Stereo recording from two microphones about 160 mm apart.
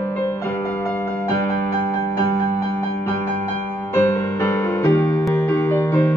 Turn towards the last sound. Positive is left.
turn(degrees=15)  # may be behind; listen again after turning